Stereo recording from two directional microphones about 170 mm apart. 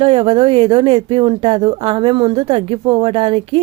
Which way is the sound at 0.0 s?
30° right (ahead or behind).